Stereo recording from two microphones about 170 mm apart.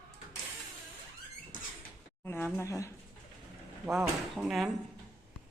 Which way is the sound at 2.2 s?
15° left (ahead or behind).